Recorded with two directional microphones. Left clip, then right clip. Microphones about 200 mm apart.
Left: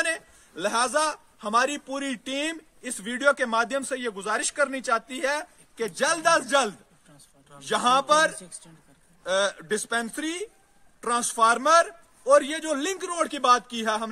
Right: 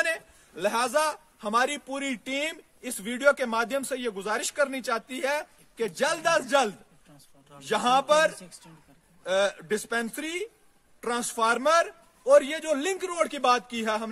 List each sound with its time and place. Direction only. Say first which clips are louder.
0.0 s a man's voice: even; 10° right (ahead or behind)
5.8 s a man's voice: left 2 dB; 5° right (ahead or behind)